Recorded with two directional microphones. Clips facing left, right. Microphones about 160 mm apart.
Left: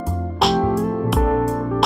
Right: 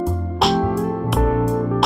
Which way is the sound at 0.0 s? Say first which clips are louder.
Right 1 dB; centre (ahead or behind).